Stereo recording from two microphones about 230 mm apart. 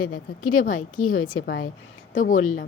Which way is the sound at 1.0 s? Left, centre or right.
Left.